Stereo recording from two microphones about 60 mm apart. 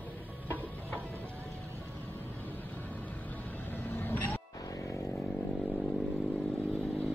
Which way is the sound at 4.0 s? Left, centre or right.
Left.